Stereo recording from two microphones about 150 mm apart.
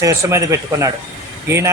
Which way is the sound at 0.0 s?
20° right (ahead or behind).